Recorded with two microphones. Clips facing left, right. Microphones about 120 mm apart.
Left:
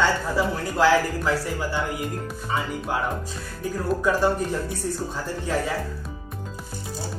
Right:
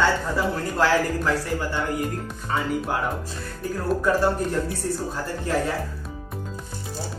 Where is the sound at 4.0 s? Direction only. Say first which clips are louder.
Even; 5° left (ahead or behind).